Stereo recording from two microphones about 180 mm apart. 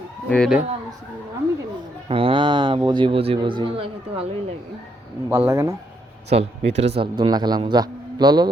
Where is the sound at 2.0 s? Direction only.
30° right (ahead or behind).